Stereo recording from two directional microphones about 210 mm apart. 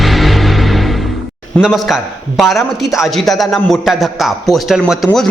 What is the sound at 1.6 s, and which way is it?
A man's voice, centre (ahead or behind).